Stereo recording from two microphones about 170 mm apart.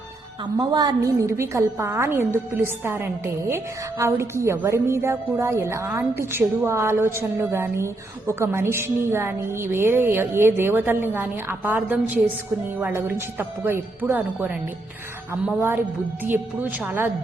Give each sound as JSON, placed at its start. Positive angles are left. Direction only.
{"t": 0.6, "sound": "a woman's voice", "side_deg": -25}